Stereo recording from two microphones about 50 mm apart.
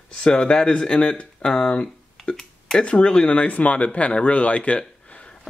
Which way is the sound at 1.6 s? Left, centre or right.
Left.